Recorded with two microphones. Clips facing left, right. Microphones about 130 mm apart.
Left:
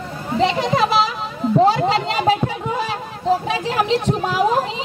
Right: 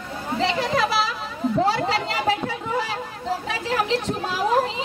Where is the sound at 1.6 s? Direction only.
15° left (ahead or behind).